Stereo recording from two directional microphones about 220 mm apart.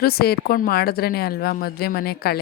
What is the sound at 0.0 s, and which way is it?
A woman's voice, 45° left (ahead or behind).